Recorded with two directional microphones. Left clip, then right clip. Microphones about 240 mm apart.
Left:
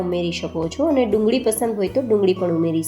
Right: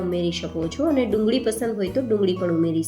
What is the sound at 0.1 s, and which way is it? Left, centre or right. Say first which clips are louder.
Speech: left 2 dB; centre.